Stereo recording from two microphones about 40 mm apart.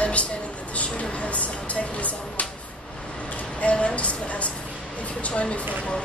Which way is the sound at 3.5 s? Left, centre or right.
Left.